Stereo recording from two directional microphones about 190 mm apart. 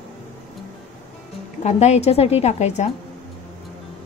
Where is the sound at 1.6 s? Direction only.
35° left (ahead or behind).